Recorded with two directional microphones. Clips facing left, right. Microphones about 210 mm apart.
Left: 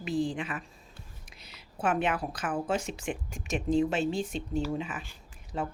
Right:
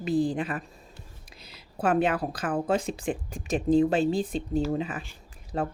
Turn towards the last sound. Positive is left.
turn(degrees=-40)  # may be behind; listen again after turning